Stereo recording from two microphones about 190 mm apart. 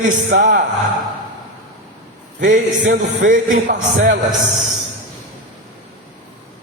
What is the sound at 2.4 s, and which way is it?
A man's voice, 40° right (ahead or behind).